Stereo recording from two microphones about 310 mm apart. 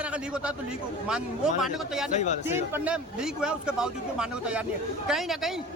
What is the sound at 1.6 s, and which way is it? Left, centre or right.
Speech, centre.